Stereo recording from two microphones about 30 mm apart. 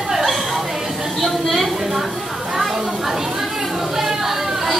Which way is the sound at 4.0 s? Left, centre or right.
Centre.